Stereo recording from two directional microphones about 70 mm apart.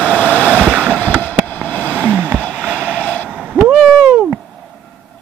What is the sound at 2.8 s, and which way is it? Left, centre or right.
Vehicle, centre.